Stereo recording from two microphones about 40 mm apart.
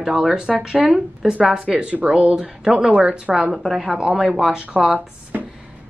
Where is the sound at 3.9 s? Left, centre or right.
Right.